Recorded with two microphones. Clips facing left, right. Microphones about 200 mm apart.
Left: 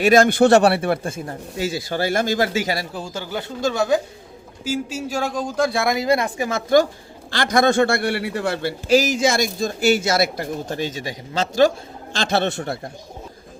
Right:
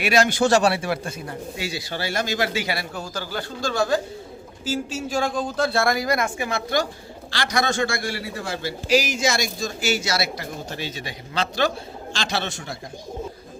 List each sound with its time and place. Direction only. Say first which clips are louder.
0.0 s a man's voice: left 6 dB; 50° left (ahead or behind)
12.1 s speech: left 7 dB; 55° left (ahead or behind)